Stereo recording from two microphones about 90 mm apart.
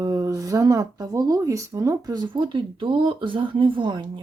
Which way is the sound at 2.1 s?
55° right (ahead or behind).